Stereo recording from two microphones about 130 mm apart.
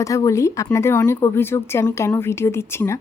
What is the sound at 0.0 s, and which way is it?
Speech, 25° left (ahead or behind).